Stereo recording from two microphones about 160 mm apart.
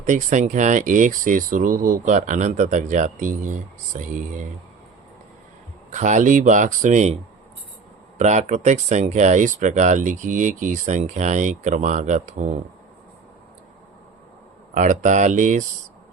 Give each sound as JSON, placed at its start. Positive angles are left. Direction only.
{"t": 0.0, "sound": "speech", "side_deg": -50}
{"t": 5.9, "sound": "speech", "side_deg": -50}
{"t": 8.2, "sound": "speech", "side_deg": -45}
{"t": 14.7, "sound": "speech", "side_deg": -50}